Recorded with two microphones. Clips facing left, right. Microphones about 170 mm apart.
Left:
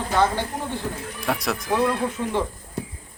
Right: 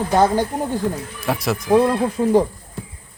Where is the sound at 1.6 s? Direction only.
35° right (ahead or behind).